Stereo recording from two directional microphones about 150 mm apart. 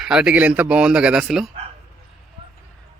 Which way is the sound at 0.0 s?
5° right (ahead or behind).